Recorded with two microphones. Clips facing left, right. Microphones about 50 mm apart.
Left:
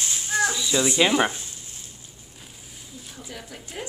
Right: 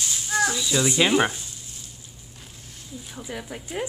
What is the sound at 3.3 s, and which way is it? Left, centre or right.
Speech, centre.